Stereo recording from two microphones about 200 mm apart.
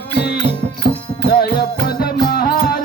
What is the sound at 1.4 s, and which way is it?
Music, 50° left (ahead or behind).